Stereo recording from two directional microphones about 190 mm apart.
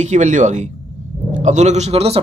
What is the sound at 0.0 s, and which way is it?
Speech, 40° right (ahead or behind).